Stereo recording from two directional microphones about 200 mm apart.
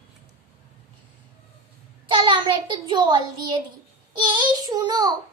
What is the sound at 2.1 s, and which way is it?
A child's voice, 25° right (ahead or behind).